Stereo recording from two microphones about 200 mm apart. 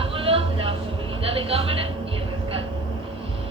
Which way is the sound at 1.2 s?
30° right (ahead or behind).